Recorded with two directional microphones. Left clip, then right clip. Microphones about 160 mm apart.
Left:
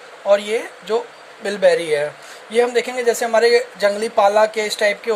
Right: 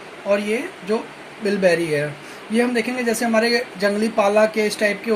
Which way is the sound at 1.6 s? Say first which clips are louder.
Left 4 dB; 60° left (ahead or behind).